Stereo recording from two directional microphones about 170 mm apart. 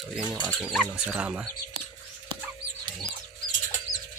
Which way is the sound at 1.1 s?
10° right (ahead or behind).